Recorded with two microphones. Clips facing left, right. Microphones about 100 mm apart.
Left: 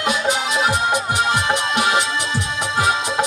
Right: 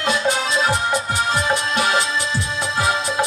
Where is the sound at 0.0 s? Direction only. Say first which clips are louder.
Even; 15° left (ahead or behind).